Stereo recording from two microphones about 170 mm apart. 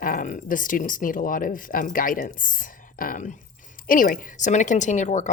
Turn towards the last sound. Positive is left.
turn(degrees=45)  # may be behind; listen again after turning